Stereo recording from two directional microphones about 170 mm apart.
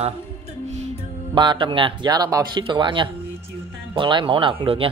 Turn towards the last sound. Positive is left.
turn(degrees=-30)  # may be behind; listen again after turning